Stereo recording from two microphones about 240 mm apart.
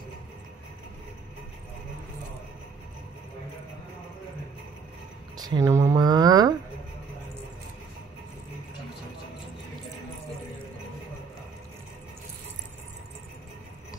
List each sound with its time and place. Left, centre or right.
5.4 s speech: centre